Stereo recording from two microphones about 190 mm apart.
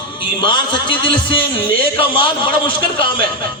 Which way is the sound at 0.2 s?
25° left (ahead or behind).